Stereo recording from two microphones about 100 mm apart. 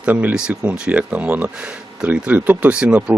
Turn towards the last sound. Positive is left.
turn(degrees=-10)  # may be behind; listen again after turning